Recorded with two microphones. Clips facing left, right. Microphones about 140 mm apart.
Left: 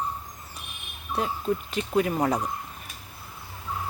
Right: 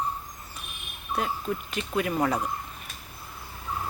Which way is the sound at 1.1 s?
30° left (ahead or behind).